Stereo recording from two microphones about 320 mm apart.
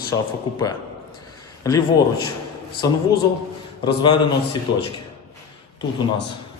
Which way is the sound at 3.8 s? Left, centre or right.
Centre.